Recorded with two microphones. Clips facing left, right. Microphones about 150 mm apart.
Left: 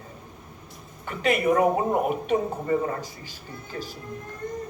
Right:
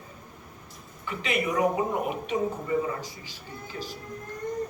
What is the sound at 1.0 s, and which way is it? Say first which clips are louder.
Speech: left 6 dB; 50° left (ahead or behind).